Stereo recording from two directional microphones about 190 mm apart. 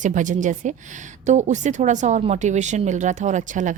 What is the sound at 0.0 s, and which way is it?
Speech, 40° right (ahead or behind).